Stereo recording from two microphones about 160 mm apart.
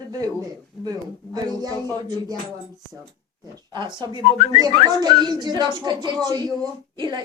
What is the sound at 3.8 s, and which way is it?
A child's voice, 30° right (ahead or behind).